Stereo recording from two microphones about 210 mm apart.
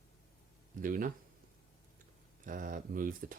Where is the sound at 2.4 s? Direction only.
40° right (ahead or behind).